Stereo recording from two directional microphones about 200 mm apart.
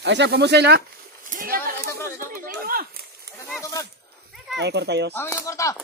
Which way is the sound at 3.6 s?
15° left (ahead or behind).